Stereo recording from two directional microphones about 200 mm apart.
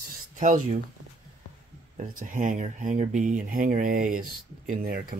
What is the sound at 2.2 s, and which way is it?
Speech, 40° right (ahead or behind).